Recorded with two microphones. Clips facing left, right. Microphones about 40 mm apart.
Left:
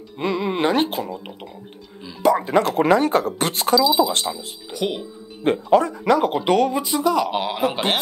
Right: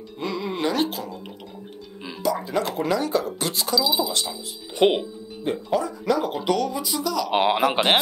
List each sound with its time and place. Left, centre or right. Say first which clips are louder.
0.2 s speech: left 5 dB; left
4.7 s speech: right 6 dB; right
5.4 s speech: left 7 dB; left
7.3 s speech: right 3 dB; right